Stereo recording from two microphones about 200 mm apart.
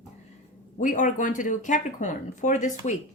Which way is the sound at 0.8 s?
40° left (ahead or behind).